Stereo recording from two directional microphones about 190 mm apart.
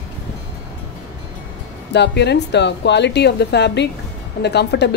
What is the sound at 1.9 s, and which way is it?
Speech, 65° left (ahead or behind).